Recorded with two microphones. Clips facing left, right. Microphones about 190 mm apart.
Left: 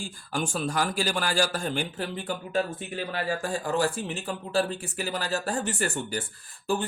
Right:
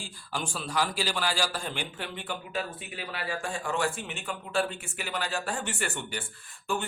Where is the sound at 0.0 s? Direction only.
50° left (ahead or behind).